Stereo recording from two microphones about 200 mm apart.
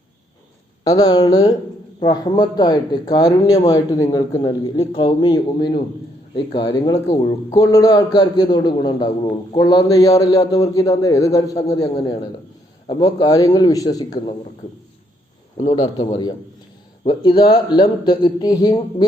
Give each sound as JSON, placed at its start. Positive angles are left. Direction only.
{"t": 0.9, "sound": "a man's voice", "side_deg": 20}
{"t": 15.7, "sound": "speech", "side_deg": 25}